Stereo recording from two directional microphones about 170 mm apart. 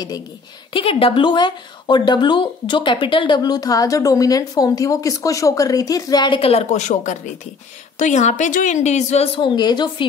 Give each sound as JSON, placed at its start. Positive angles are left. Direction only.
{"t": 0.7, "sound": "a woman's voice", "side_deg": 35}